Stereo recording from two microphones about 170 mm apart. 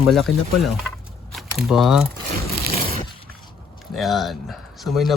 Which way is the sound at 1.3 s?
Centre (ahead or behind).